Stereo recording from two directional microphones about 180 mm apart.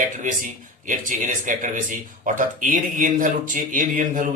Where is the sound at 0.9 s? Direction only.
45° right (ahead or behind).